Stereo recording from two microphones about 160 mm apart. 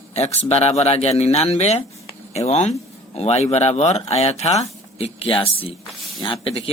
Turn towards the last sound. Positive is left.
turn(degrees=35)  # may be behind; listen again after turning